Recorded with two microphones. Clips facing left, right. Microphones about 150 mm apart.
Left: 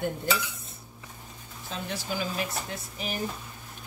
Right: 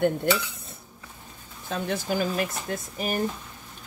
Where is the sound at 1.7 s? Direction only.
55° right (ahead or behind).